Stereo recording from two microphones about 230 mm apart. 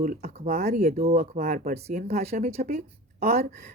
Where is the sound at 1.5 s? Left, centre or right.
Right.